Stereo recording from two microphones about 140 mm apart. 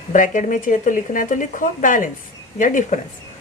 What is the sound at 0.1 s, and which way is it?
Speech, 65° left (ahead or behind).